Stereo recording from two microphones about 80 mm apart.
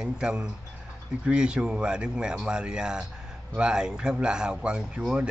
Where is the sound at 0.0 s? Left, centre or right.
Centre.